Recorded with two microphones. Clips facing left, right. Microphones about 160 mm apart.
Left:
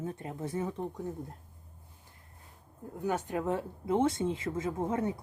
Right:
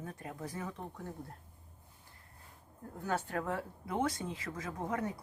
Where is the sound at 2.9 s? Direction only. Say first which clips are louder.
Left 4 dB; 15° left (ahead or behind).